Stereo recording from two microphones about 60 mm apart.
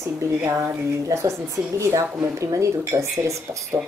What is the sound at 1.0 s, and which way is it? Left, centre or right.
A woman's voice, right.